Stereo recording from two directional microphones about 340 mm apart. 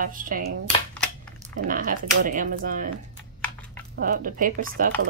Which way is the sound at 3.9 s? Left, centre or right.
Right.